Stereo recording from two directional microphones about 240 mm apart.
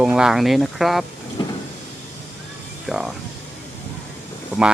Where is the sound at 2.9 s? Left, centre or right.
Centre.